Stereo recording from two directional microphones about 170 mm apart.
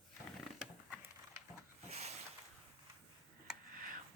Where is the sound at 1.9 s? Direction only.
40° right (ahead or behind).